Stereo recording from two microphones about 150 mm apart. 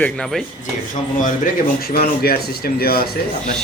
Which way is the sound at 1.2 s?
70° left (ahead or behind).